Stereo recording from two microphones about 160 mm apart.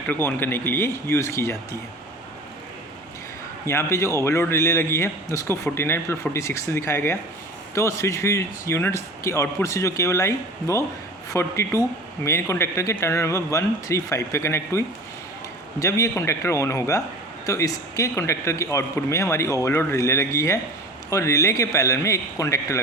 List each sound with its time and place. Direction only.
0.1 s a man's voice: 10° left (ahead or behind)
3.7 s a man's voice: 15° left (ahead or behind)